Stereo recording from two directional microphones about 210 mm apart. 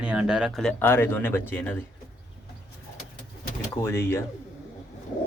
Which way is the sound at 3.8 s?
10° left (ahead or behind).